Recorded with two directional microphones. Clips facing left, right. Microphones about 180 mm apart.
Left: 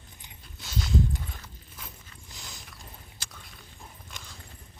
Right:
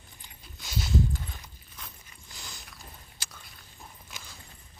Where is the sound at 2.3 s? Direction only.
Centre (ahead or behind).